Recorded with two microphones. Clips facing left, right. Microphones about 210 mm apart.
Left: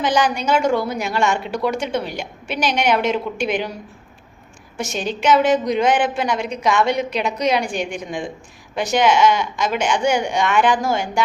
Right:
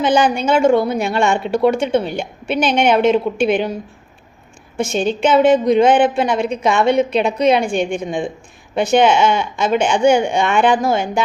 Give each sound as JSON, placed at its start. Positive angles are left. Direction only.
{"t": 0.0, "sound": "a woman's voice", "side_deg": -25}
{"t": 4.8, "sound": "a woman's voice", "side_deg": -25}